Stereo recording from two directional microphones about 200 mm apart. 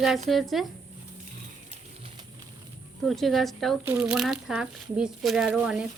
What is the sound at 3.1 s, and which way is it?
Speech, centre (ahead or behind).